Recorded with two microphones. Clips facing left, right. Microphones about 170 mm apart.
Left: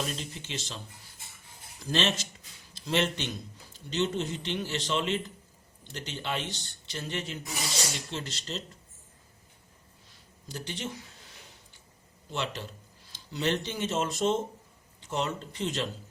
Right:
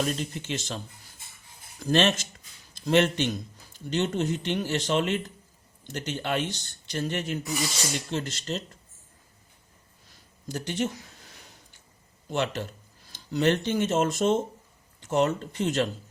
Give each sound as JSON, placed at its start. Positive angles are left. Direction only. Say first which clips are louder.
{"t": 0.0, "sound": "a man's voice", "louder": "right 6 dB", "side_deg": -50}
{"t": 1.8, "sound": "a man's voice", "louder": "right 6 dB", "side_deg": -50}
{"t": 10.5, "sound": "a man's voice", "louder": "right 8 dB", "side_deg": -50}
{"t": 12.3, "sound": "a man's voice", "louder": "right 6 dB", "side_deg": -50}